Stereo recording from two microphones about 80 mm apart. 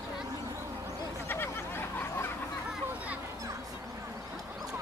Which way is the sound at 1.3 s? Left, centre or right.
Left.